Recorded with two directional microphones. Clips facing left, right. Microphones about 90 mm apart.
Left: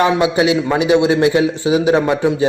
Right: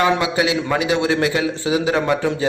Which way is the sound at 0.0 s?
20° left (ahead or behind).